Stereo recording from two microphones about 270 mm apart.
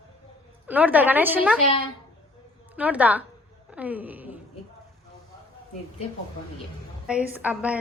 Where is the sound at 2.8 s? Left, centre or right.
Centre.